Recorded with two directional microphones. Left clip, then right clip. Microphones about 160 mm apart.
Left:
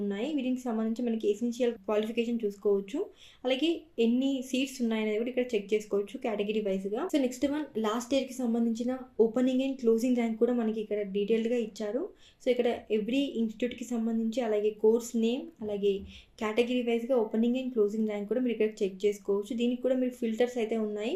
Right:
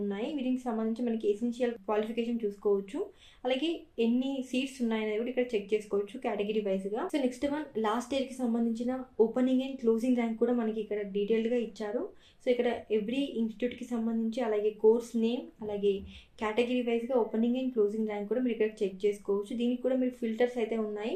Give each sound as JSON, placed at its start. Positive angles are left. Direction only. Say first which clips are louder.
{"t": 0.1, "sound": "a woman's voice", "louder": "left 1 dB", "side_deg": 35}